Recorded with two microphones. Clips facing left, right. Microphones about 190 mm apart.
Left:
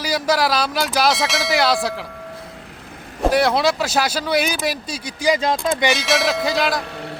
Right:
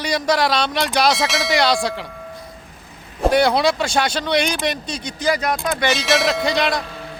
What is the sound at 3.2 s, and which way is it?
Speech, centre (ahead or behind).